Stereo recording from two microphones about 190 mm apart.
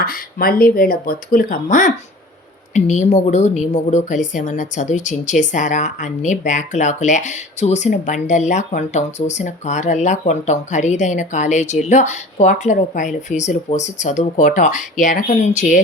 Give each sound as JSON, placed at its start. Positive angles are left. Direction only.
{"t": 0.0, "sound": "a woman's voice", "side_deg": 50}